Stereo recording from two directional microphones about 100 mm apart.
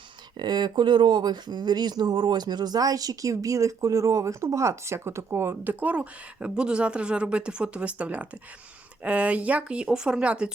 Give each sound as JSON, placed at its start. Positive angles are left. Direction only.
{"t": 0.3, "sound": "speech", "side_deg": -45}